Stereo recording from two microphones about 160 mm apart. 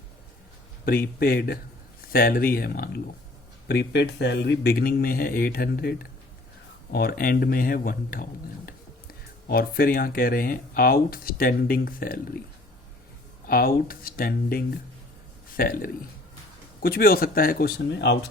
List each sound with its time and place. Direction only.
0.9 s speech: 70° left (ahead or behind)
3.7 s speech: 90° left; by 12.2 s 65° left (ahead or behind)
13.5 s speech: 65° left (ahead or behind); by 18.2 s 90° left